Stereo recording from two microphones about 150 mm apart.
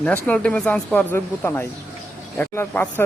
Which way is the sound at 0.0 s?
10° left (ahead or behind).